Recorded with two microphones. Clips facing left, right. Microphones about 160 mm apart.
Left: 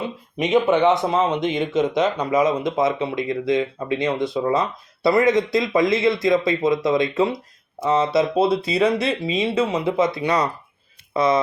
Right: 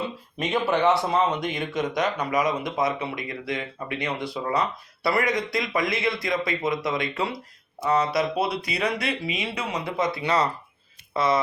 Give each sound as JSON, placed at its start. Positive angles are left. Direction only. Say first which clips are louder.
{"t": 0.3, "sound": "speech", "louder": "left 6 dB", "side_deg": 20}